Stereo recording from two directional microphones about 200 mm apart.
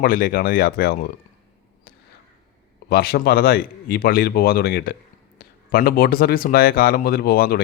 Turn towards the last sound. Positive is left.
turn(degrees=50)  # may be behind; listen again after turning